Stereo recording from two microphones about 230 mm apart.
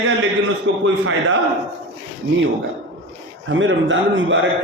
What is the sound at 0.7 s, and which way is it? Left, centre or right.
Speech, right.